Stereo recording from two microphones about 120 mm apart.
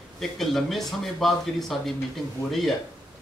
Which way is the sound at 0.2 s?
Centre (ahead or behind).